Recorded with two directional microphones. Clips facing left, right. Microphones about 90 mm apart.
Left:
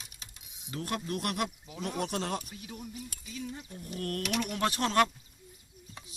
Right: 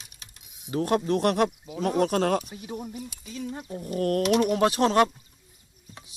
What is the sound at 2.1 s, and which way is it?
Speech, 65° right (ahead or behind).